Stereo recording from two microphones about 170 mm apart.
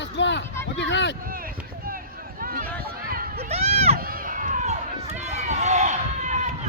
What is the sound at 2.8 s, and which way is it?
Run, 60° right (ahead or behind).